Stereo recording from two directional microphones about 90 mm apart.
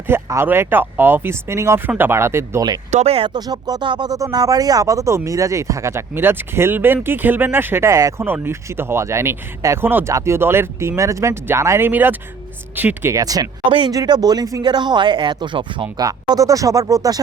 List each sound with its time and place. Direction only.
0.1 s speech: 25° right (ahead or behind)
3.3 s speech: 45° right (ahead or behind)
8.2 s speech: 25° right (ahead or behind)
13.1 s speech: 45° right (ahead or behind)
13.7 s speech: 70° right (ahead or behind)
13.9 s speech: 45° right (ahead or behind); by 15.9 s 60° right (ahead or behind)
16.0 s speech: 45° right (ahead or behind)